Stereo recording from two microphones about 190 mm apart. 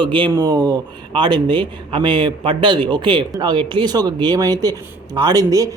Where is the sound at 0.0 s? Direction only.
25° right (ahead or behind).